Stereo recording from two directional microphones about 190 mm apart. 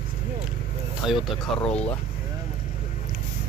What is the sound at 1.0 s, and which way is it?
Speech, centre (ahead or behind).